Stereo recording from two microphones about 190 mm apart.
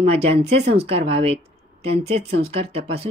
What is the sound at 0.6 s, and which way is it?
Speech, 60° right (ahead or behind).